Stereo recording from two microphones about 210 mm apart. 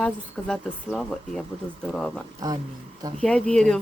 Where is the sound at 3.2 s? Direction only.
5° left (ahead or behind).